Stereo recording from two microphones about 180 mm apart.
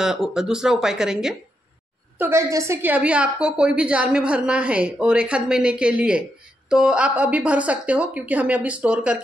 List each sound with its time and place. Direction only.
0.0 s a woman's voice: centre (ahead or behind)